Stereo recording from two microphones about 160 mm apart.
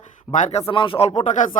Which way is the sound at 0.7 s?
35° left (ahead or behind).